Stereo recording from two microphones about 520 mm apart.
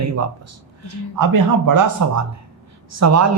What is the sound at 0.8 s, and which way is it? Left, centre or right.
Speech, right.